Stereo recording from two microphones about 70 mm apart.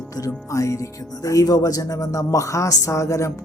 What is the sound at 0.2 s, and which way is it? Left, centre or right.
Speech, left.